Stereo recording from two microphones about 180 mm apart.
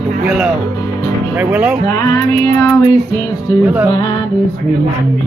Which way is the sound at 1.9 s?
20° left (ahead or behind).